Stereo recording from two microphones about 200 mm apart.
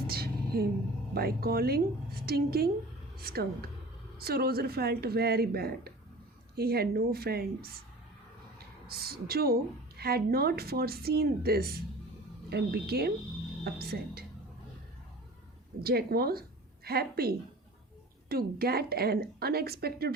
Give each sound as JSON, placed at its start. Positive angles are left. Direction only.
{"t": 0.1, "sound": "a sound", "side_deg": -50}
{"t": 1.1, "sound": "a woman's voice", "side_deg": -50}
{"t": 15.8, "sound": "a woman's voice", "side_deg": -50}